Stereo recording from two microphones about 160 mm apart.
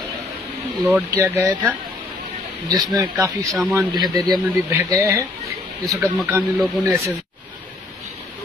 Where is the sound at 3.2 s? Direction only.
20° right (ahead or behind).